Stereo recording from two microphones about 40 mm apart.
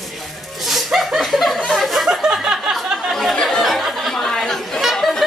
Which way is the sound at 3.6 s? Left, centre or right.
Centre.